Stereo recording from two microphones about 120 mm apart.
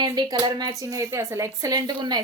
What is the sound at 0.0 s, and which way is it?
A woman's voice, 35° right (ahead or behind).